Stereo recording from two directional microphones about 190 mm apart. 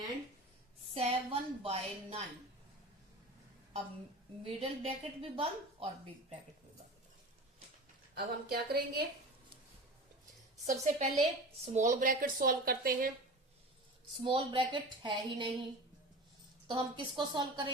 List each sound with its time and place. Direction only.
0.9 s a woman's voice: 30° right (ahead or behind)
4.4 s a woman's voice: 30° right (ahead or behind)
8.1 s speech: 55° right (ahead or behind)
10.7 s a woman's voice: 40° right (ahead or behind)
14.3 s a woman's voice: 25° right (ahead or behind)
16.6 s a woman's voice: 25° right (ahead or behind)